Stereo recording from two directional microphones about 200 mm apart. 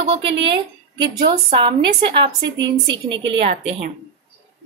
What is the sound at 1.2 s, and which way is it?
A woman's voice, 25° right (ahead or behind).